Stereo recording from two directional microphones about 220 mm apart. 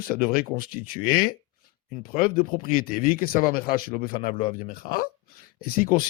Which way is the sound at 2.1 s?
40° left (ahead or behind).